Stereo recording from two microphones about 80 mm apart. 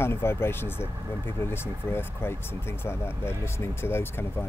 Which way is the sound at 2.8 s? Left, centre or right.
Left.